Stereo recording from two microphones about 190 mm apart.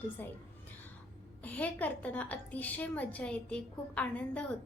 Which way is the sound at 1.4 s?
10° left (ahead or behind).